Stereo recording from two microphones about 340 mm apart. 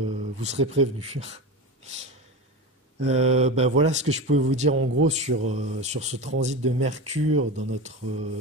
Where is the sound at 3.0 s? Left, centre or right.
Centre.